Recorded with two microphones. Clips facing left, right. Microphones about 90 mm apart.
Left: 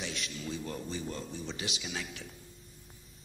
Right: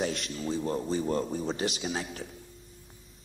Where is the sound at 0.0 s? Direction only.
40° right (ahead or behind).